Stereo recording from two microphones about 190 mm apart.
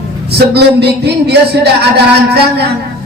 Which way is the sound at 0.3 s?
60° right (ahead or behind).